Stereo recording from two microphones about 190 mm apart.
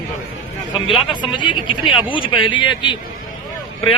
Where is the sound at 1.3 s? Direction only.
25° left (ahead or behind).